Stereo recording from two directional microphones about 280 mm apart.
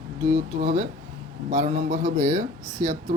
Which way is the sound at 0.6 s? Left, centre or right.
Right.